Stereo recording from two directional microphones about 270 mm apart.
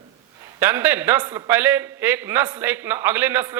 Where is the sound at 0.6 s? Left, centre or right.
Centre.